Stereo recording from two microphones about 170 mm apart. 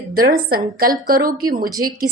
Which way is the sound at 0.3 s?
60° right (ahead or behind).